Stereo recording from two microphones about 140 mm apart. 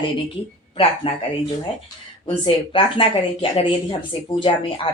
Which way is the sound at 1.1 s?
40° left (ahead or behind).